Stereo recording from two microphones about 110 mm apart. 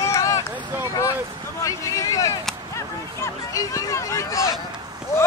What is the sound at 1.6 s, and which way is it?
Speech, 30° left (ahead or behind).